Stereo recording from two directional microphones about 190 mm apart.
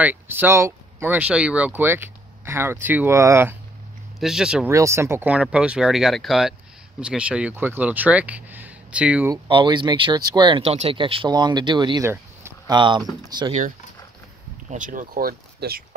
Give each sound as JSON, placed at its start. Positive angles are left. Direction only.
{"t": 0.0, "sound": "speech", "side_deg": -10}
{"t": 4.2, "sound": "speech", "side_deg": -5}
{"t": 4.6, "sound": "speech", "side_deg": -15}
{"t": 9.3, "sound": "speech", "side_deg": -25}
{"t": 12.1, "sound": "a sound", "side_deg": -15}
{"t": 12.7, "sound": "speech", "side_deg": -25}
{"t": 13.5, "sound": "speech", "side_deg": -40}